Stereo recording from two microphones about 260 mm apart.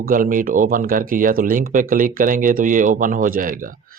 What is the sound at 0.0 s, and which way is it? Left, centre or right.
Speech, right.